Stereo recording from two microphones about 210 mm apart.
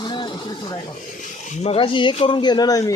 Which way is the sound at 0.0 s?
20° left (ahead or behind).